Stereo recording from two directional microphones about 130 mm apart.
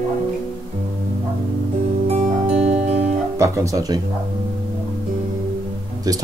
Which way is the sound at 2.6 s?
60° right (ahead or behind).